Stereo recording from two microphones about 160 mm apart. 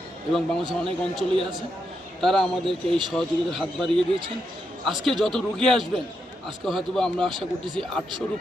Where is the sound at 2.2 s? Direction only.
5° left (ahead or behind).